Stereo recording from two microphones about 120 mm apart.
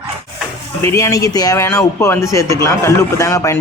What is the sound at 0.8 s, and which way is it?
Speech, 25° left (ahead or behind).